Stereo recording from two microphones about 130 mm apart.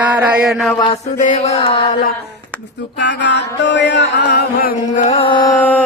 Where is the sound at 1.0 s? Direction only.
65° left (ahead or behind); by 1.9 s 45° left (ahead or behind).